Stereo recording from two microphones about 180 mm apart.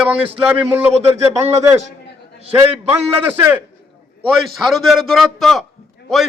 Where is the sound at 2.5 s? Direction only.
10° right (ahead or behind).